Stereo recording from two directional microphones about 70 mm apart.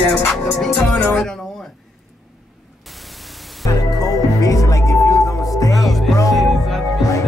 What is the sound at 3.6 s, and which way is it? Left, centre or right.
Music, left.